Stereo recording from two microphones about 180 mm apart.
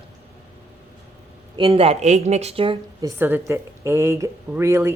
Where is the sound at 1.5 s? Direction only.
30° right (ahead or behind).